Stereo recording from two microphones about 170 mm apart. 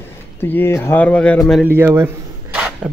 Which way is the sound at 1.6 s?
15° right (ahead or behind).